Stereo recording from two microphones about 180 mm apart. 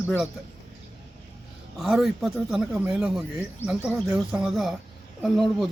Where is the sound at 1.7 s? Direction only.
Centre (ahead or behind).